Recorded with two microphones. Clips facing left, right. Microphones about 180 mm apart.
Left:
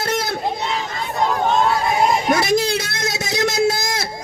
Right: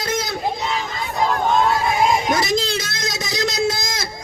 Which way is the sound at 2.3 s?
60° left (ahead or behind).